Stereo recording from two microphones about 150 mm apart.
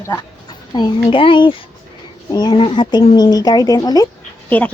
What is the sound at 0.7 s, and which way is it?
A child's voice, 30° left (ahead or behind).